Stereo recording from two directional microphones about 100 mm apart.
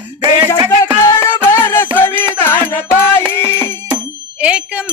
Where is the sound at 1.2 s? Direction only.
25° left (ahead or behind).